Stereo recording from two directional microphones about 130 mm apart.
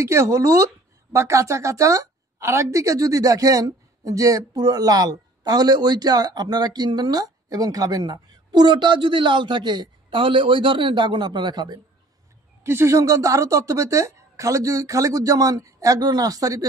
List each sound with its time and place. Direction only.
0.0 s a woman's voice: 20° right (ahead or behind)
12.6 s a woman's voice: 20° right (ahead or behind)